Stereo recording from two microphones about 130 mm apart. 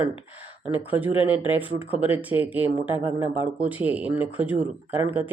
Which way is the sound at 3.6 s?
10° right (ahead or behind).